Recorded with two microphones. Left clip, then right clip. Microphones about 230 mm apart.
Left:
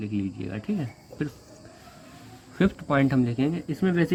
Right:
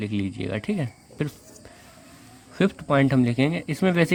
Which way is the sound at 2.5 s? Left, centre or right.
Right.